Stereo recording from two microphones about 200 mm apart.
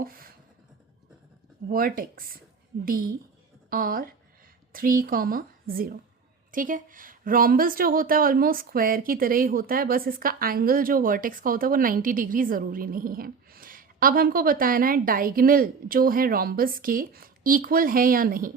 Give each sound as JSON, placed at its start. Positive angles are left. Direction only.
{"t": 0.0, "sound": "beatboxing", "side_deg": -45}
{"t": 1.7, "sound": "a woman's voice", "side_deg": -45}